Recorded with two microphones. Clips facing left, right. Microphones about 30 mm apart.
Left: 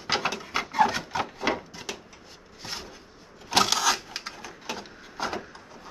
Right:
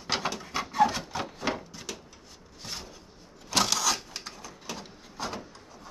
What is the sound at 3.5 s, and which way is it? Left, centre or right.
Printer, left.